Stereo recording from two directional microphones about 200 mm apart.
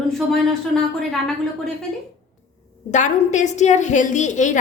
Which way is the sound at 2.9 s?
35° left (ahead or behind).